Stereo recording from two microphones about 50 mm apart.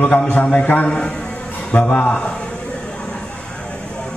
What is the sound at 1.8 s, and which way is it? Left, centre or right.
Speech, left.